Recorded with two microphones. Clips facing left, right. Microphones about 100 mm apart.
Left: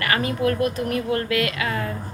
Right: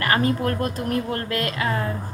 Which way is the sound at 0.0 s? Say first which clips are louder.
Right 1 dB; 35° right (ahead or behind).